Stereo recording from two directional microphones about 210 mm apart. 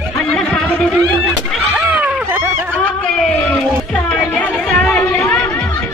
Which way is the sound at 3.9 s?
5° left (ahead or behind).